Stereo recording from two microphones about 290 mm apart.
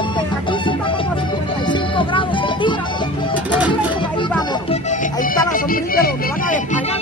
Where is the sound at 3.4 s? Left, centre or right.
Centre.